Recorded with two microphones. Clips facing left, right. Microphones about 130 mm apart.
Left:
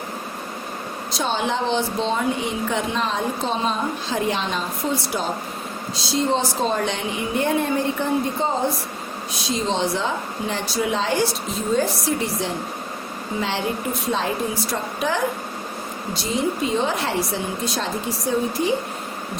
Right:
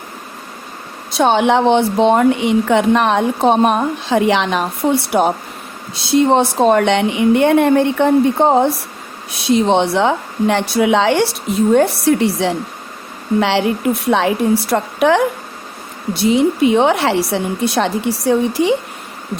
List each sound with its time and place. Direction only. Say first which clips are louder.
1.1 s speech: right 11 dB; 65° right (ahead or behind)